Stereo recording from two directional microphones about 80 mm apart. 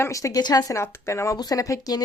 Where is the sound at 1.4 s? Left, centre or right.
Left.